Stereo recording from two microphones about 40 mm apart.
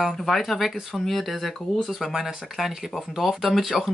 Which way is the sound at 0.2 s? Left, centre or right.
Centre.